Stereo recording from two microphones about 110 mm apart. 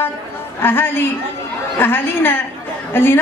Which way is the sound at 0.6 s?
20° left (ahead or behind).